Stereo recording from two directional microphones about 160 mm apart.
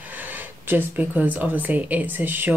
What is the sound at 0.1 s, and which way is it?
Speech, 10° right (ahead or behind).